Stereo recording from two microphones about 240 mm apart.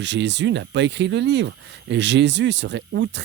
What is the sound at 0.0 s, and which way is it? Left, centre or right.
Speech, right.